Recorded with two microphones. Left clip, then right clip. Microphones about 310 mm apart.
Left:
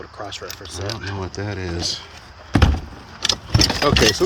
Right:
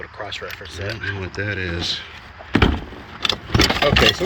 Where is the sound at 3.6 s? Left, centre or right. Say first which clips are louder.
Right 1 dB; centre.